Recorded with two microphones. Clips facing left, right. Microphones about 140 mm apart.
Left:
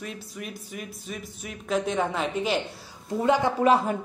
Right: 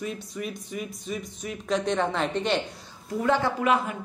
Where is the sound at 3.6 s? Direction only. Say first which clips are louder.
Left 3 dB; 35° left (ahead or behind).